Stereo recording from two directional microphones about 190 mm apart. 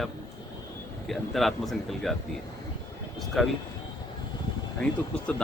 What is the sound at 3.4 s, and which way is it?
Speech, centre (ahead or behind).